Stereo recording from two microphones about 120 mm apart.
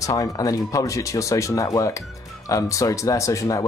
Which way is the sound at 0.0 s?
30° left (ahead or behind).